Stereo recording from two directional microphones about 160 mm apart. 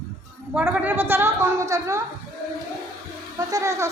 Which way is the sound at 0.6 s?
10° right (ahead or behind).